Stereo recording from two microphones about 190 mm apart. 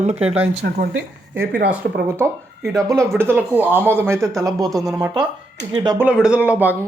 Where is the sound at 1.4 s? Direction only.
55° right (ahead or behind).